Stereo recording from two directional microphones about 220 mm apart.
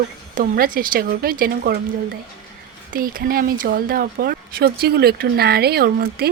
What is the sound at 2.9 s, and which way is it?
Speech, 40° right (ahead or behind).